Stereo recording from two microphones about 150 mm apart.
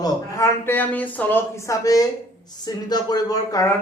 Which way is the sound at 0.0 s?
20° left (ahead or behind).